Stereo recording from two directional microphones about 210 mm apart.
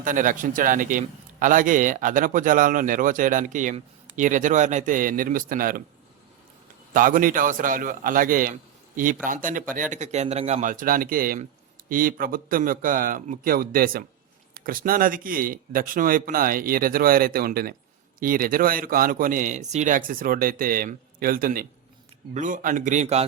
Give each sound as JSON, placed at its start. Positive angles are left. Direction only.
{"t": 0.0, "sound": "a man's voice", "side_deg": -40}
{"t": 6.9, "sound": "a man's voice", "side_deg": -40}